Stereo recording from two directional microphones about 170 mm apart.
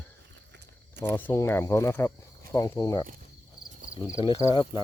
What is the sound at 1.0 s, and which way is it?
Speech, 10° left (ahead or behind).